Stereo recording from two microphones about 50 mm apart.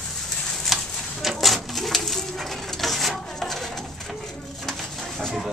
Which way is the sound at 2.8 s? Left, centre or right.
Centre.